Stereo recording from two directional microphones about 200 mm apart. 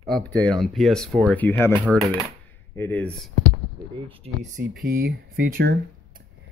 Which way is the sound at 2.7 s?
10° left (ahead or behind).